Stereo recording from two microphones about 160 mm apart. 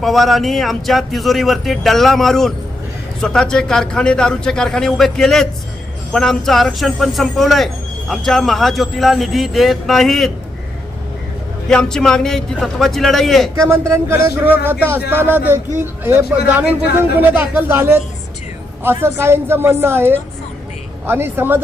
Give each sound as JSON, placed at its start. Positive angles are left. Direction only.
{"t": 0.0, "sound": "a man's voice", "side_deg": 0}
{"t": 11.7, "sound": "a man's voice", "side_deg": 5}
{"t": 13.6, "sound": "a woman's voice", "side_deg": -20}